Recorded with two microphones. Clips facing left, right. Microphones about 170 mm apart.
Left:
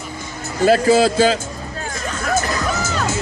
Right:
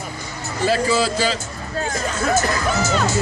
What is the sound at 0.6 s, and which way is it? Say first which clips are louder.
Speech: left 6 dB; 50° left (ahead or behind).